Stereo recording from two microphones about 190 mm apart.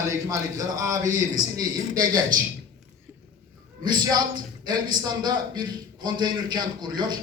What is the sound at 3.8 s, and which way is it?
Speech, 20° right (ahead or behind).